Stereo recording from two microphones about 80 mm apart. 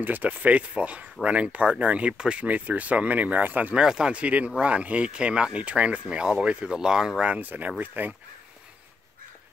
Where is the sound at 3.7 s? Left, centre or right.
Centre.